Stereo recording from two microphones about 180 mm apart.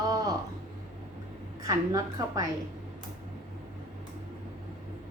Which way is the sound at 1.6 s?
20° right (ahead or behind).